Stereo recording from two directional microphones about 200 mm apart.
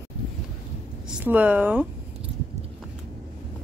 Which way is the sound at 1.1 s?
10° right (ahead or behind).